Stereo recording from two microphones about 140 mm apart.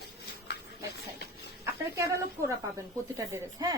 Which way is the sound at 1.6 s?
20° right (ahead or behind).